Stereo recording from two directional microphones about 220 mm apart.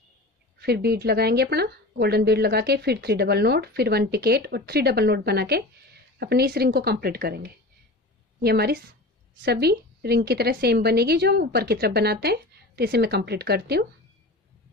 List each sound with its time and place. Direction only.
0.6 s speech: 45° right (ahead or behind)